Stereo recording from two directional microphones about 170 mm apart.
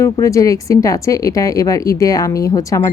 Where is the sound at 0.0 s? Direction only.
15° left (ahead or behind).